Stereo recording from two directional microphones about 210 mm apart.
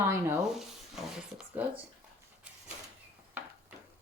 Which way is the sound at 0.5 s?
Centre (ahead or behind).